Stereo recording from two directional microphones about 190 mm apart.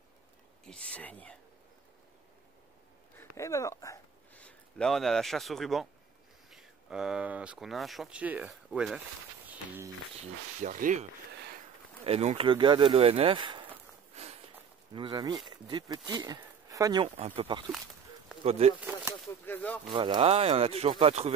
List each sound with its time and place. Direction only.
0.7 s speech: 5° left (ahead or behind)
3.2 s speech: 15° left (ahead or behind); by 9.0 s 5° right (ahead or behind)
10.6 s speech: 40° right (ahead or behind); by 13.7 s 25° right (ahead or behind)
14.9 s speech: 25° right (ahead or behind)
17.0 s speech: 30° right (ahead or behind)
18.8 s a sound: 10° right (ahead or behind)
19.2 s speech: 10° left (ahead or behind)
19.9 s speech: 25° right (ahead or behind)